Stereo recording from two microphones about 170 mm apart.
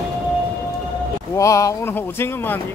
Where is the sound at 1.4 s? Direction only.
20° left (ahead or behind).